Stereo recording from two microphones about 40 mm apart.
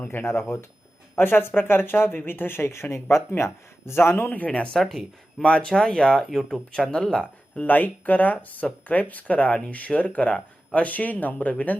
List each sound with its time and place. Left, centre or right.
0.0 s speech: left
0.3 s speech: left
1.1 s speech: left
3.9 s speech: left
4.3 s speech: left
4.8 s speech: centre
5.4 s speech: left
5.6 s speech: centre
6.2 s speech: centre
6.9 s speech: centre
7.6 s speech: left